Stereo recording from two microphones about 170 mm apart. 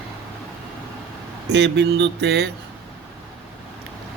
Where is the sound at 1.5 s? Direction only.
90° right.